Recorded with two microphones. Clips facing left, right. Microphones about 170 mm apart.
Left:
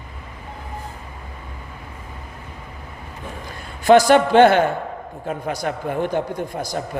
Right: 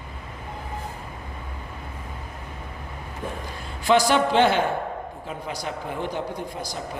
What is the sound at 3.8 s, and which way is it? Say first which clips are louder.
A man's voice: left 7 dB; 50° left (ahead or behind).